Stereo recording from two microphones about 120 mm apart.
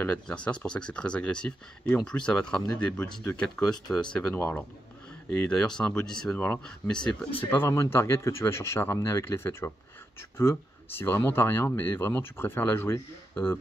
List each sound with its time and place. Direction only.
0.0 s speech: 10° left (ahead or behind)